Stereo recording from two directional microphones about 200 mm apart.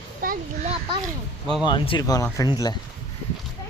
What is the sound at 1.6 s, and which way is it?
Speech, 25° left (ahead or behind).